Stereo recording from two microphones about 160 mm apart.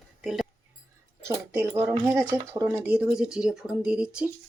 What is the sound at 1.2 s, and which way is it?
Speech, 15° right (ahead or behind).